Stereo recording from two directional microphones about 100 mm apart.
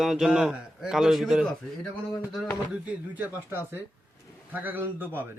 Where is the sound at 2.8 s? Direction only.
15° right (ahead or behind).